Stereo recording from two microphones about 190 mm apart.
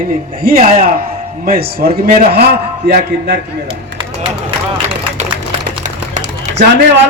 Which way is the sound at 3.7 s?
30° right (ahead or behind).